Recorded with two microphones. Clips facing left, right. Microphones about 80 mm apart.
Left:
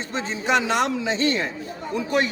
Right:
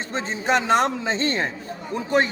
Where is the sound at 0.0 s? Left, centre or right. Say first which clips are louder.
Right 1 dB; right.